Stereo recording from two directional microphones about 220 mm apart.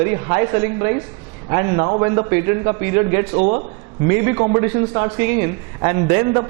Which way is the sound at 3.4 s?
25° right (ahead or behind).